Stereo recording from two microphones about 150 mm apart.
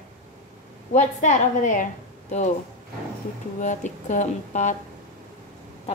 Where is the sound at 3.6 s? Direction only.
55° left (ahead or behind).